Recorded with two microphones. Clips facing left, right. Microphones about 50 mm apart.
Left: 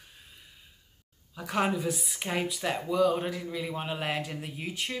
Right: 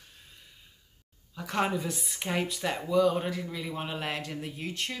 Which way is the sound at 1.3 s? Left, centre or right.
Centre.